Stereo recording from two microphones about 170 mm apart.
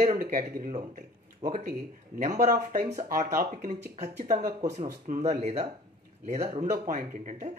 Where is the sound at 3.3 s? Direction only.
55° right (ahead or behind).